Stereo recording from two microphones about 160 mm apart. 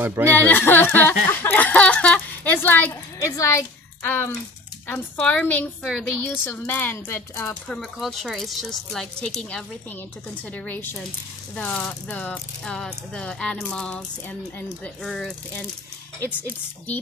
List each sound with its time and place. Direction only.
0.0 s speech: 15° right (ahead or behind)
0.3 s a sound: 10° left (ahead or behind)
4.8 s a woman's voice: 10° left (ahead or behind)
8.0 s a woman's voice: centre (ahead or behind)
15.0 s a woman's voice: 5° left (ahead or behind)